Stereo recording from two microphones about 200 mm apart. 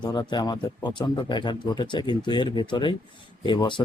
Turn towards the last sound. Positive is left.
turn(degrees=25)  # may be behind; listen again after turning